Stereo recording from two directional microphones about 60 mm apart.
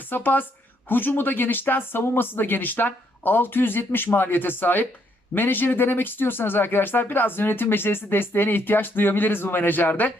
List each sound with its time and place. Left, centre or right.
0.1 s speech: left